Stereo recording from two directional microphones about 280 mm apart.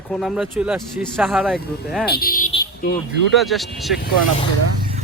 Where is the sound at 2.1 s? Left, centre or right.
Left.